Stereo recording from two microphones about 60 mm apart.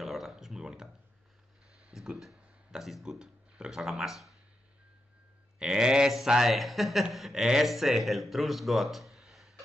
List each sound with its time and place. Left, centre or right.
0.0 s a sound: centre
2.8 s speech: centre
5.6 s speech: centre